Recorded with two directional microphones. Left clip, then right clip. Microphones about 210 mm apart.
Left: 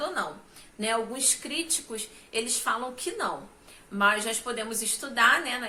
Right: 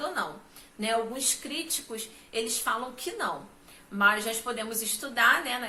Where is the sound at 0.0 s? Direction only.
20° left (ahead or behind).